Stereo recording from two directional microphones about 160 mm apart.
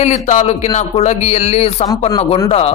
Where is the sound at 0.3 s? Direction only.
45° left (ahead or behind).